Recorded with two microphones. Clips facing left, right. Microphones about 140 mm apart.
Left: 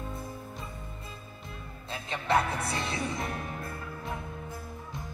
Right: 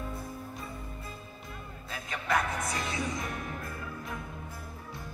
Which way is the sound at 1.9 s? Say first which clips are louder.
Left 3 dB; 30° left (ahead or behind).